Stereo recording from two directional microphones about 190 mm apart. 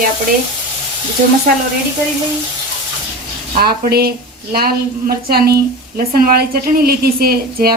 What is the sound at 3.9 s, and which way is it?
A woman's voice, 55° right (ahead or behind).